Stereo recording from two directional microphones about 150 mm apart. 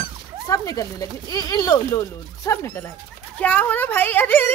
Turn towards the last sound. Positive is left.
turn(degrees=15)  # may be behind; listen again after turning